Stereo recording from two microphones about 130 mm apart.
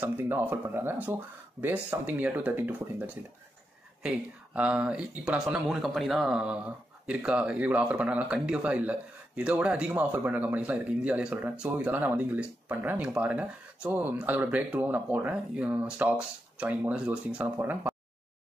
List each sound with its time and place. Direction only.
0.0 s speech: 15° right (ahead or behind)
4.6 s speech: 10° right (ahead or behind)